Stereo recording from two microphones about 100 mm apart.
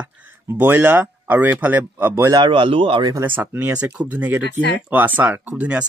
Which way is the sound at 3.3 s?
15° right (ahead or behind).